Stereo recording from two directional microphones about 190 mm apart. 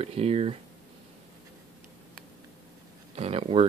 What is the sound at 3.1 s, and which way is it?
Speech, 30° right (ahead or behind).